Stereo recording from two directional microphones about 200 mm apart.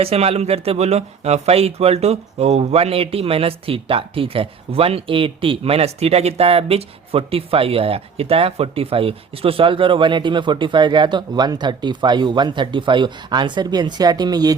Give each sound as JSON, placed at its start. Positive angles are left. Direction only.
{"t": 0.0, "sound": "speech", "side_deg": -30}